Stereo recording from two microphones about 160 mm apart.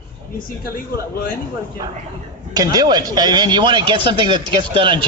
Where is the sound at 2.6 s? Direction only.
25° right (ahead or behind).